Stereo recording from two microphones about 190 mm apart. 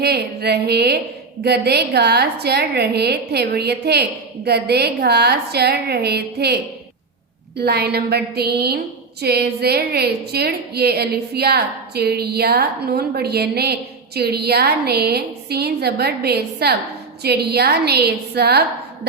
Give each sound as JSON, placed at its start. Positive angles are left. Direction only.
{"t": 0.0, "sound": "a woman's voice", "side_deg": -60}
{"t": 7.6, "sound": "a woman's voice", "side_deg": -60}